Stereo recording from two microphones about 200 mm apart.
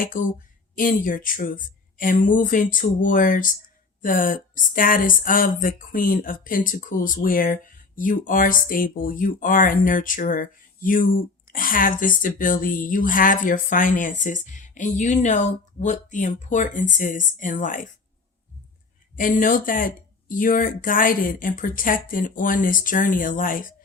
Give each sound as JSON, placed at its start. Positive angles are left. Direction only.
{"t": 0.0, "sound": "speech", "side_deg": 40}
{"t": 19.1, "sound": "speech", "side_deg": 40}